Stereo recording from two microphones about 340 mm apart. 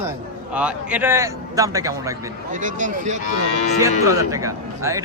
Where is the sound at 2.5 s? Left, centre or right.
Right.